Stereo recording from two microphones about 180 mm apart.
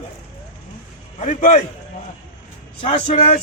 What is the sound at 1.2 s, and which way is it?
Speech, 40° left (ahead or behind).